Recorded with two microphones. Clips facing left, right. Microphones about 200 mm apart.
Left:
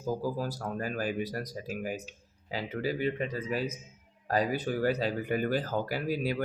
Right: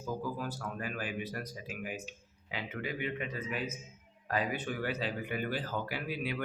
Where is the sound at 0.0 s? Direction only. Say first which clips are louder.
Left 5 dB; 35° left (ahead or behind).